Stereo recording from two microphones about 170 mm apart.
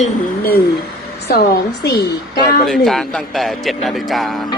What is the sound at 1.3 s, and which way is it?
Speech, 65° left (ahead or behind).